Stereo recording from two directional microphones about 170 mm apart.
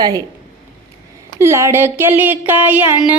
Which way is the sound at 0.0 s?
20° right (ahead or behind).